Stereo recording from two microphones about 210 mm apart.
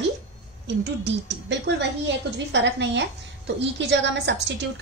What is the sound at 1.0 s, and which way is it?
A woman's voice, 55° right (ahead or behind).